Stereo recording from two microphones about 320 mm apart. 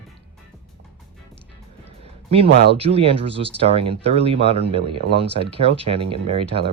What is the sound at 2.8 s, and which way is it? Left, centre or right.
Speech, centre.